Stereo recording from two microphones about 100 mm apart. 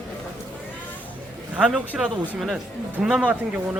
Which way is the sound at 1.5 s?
10° right (ahead or behind).